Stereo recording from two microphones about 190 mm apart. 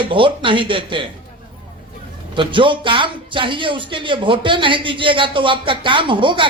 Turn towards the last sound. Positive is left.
turn(degrees=-25)  # may be behind; listen again after turning